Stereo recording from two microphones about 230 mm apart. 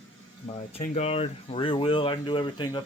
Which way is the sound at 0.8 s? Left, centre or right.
Left.